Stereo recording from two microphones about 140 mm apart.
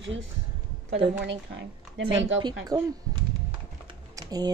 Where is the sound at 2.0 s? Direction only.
35° right (ahead or behind).